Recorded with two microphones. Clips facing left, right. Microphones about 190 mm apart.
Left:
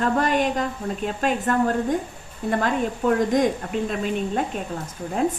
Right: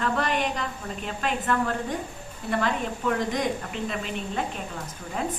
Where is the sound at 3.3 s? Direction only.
45° left (ahead or behind).